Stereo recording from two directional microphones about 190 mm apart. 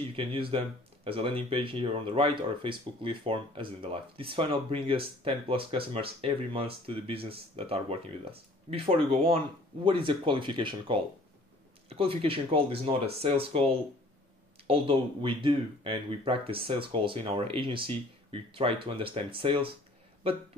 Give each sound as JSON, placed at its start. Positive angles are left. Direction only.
{"t": 0.1, "sound": "speech", "side_deg": -30}